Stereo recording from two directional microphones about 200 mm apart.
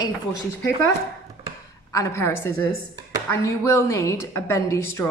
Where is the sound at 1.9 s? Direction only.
15° left (ahead or behind).